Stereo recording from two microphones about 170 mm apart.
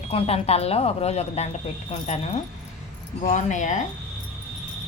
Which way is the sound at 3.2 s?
45° left (ahead or behind).